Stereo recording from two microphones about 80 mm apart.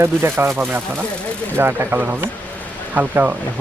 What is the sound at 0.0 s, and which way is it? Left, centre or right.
Speech, right.